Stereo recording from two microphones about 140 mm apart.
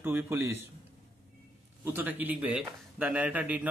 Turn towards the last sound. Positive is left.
turn(degrees=-10)  # may be behind; listen again after turning